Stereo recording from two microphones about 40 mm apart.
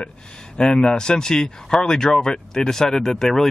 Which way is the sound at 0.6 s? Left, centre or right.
Centre.